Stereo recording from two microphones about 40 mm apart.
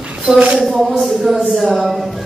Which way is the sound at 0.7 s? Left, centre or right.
Centre.